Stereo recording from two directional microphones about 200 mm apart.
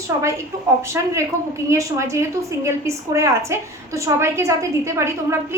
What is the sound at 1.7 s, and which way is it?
A woman's voice, 15° right (ahead or behind).